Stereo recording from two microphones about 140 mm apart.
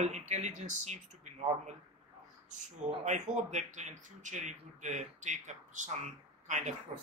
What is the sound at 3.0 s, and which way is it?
Speech, 60° right (ahead or behind).